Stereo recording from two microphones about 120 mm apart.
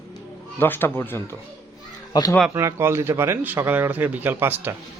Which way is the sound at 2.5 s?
25° right (ahead or behind).